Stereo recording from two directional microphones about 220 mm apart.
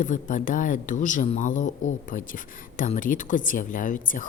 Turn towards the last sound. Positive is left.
turn(degrees=35)  # may be behind; listen again after turning